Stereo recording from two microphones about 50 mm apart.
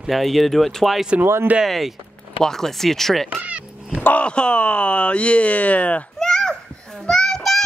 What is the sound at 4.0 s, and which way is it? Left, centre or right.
Speech, left.